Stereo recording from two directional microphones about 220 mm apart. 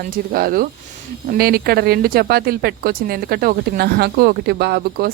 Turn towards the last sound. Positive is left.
turn(degrees=-45)  # may be behind; listen again after turning